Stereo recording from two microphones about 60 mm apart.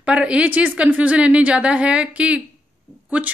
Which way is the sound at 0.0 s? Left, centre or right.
Centre.